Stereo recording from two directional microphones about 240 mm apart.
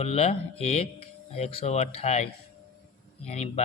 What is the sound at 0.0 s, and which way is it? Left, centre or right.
Speech, left.